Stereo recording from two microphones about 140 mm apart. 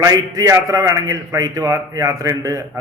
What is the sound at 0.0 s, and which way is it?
A man's voice, 25° right (ahead or behind).